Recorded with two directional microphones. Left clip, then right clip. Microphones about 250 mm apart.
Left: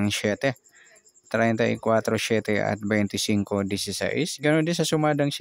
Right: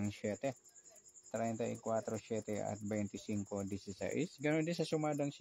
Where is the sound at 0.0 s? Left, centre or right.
Left.